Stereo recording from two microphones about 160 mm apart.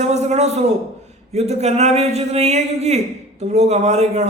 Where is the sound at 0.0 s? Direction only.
45° right (ahead or behind).